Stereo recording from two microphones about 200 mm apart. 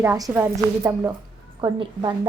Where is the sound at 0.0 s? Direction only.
10° right (ahead or behind).